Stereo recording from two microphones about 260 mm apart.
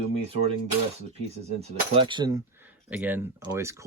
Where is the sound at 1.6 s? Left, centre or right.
Centre.